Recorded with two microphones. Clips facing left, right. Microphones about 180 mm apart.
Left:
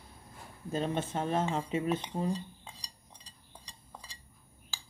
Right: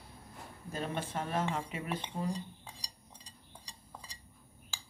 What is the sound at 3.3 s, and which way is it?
Stir, 10° right (ahead or behind).